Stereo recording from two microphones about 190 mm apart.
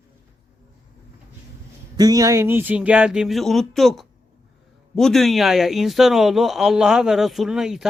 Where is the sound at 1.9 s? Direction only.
20° right (ahead or behind).